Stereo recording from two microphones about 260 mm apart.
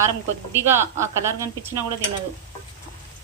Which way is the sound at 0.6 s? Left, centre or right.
Centre.